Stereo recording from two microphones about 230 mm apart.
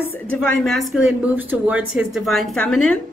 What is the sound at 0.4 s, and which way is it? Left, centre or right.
A woman's voice, centre.